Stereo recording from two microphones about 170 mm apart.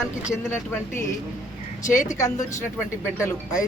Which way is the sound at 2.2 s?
20° left (ahead or behind).